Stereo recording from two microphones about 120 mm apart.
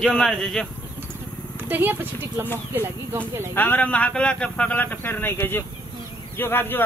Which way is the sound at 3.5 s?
15° left (ahead or behind).